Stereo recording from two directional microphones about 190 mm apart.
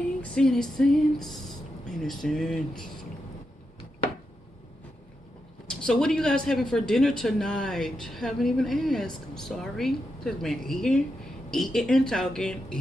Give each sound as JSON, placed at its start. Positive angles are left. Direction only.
{"t": 0.2, "sound": "speech", "side_deg": 5}
{"t": 5.7, "sound": "speech", "side_deg": 5}